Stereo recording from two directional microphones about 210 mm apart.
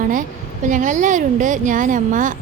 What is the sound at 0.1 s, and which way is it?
Speech, 40° right (ahead or behind).